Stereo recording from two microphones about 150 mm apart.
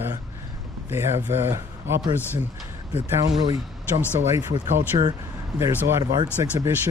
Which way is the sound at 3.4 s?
25° right (ahead or behind).